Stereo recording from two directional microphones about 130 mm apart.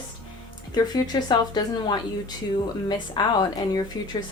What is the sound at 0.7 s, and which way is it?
Speech, 30° left (ahead or behind).